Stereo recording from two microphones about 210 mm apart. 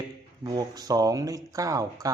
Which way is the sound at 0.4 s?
15° right (ahead or behind).